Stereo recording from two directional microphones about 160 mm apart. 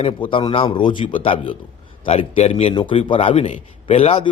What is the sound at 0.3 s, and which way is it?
A man's voice, 30° left (ahead or behind).